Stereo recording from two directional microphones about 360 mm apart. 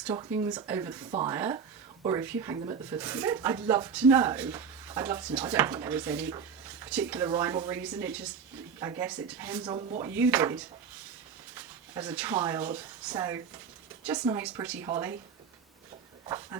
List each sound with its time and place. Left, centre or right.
0.4 s speech: centre